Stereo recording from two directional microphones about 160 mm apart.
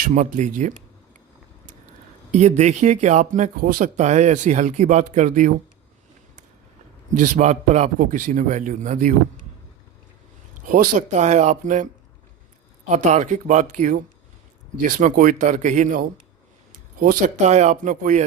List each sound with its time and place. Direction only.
0.0 s speech: 50° right (ahead or behind)
2.3 s speech: 45° right (ahead or behind)
7.1 s speech: 50° right (ahead or behind)
10.7 s speech: 55° right (ahead or behind)
12.9 s speech: 50° right (ahead or behind)